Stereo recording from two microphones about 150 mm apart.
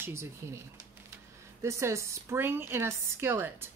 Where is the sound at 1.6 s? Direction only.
20° right (ahead or behind).